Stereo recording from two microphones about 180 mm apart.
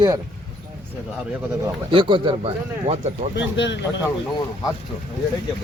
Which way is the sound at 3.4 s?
80° left.